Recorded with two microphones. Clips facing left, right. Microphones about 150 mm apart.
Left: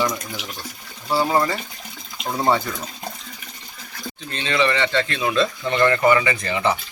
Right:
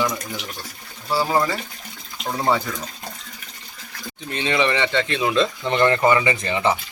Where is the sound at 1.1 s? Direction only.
Centre (ahead or behind).